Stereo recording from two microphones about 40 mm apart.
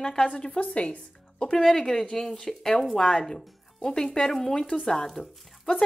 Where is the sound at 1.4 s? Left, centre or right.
Centre.